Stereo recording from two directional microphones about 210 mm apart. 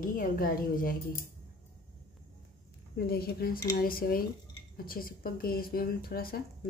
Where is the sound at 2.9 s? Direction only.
45° left (ahead or behind).